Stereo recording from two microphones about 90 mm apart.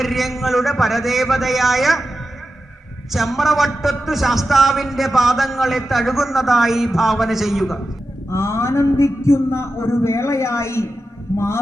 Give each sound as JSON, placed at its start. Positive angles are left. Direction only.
{"t": 0.0, "sound": "a man's voice", "side_deg": 0}
{"t": 3.1, "sound": "a man's voice", "side_deg": 0}
{"t": 8.3, "sound": "a man's voice", "side_deg": 30}